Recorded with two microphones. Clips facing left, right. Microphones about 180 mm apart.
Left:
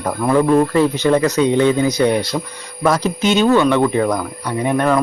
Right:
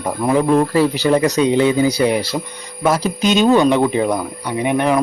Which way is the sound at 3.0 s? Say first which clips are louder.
Even; 15° right (ahead or behind).